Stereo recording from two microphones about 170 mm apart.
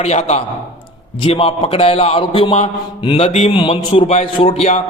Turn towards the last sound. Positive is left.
turn(degrees=40)  # may be behind; listen again after turning